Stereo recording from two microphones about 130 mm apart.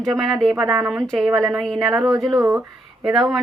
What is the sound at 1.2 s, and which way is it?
Speech, 25° right (ahead or behind).